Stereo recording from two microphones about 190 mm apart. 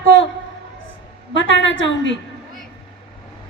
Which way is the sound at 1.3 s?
75° left (ahead or behind).